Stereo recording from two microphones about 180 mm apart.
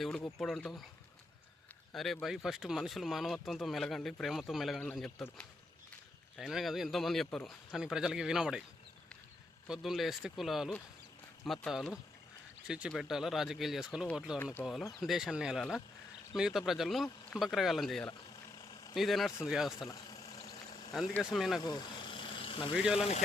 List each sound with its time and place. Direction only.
0.0 s speech: 5° left (ahead or behind)
1.9 s speech: centre (ahead or behind)
6.3 s speech: centre (ahead or behind)
9.6 s speech: centre (ahead or behind)
19.9 s a sound: 20° left (ahead or behind)
20.7 s a sound: 35° left (ahead or behind)
21.2 s speech: centre (ahead or behind)
21.6 s vehicle: 25° left (ahead or behind)
22.7 s speech: 5° right (ahead or behind)
23.0 s speech: 35° left (ahead or behind)